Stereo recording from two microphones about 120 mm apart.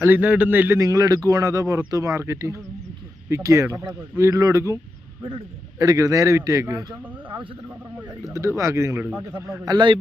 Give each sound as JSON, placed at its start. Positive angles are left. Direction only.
{"t": 0.0, "sound": "a man's voice", "side_deg": -15}
{"t": 0.8, "sound": "a man's voice", "side_deg": -30}
{"t": 5.8, "sound": "a man's voice", "side_deg": -30}
{"t": 8.3, "sound": "a man's voice", "side_deg": -25}
{"t": 9.7, "sound": "a man's voice", "side_deg": -40}